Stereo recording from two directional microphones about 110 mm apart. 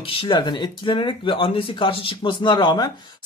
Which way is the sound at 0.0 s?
55° left (ahead or behind).